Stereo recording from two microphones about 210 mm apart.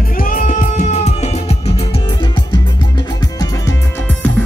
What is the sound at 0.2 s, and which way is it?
Music, 40° left (ahead or behind).